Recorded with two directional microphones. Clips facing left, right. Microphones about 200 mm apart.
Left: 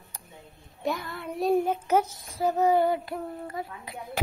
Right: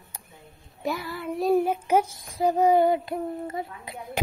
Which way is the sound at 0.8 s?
Centre (ahead or behind).